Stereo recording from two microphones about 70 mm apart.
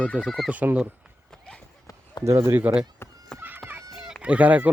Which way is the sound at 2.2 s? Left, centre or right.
Right.